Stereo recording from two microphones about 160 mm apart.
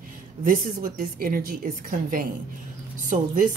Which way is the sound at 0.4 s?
60° right (ahead or behind).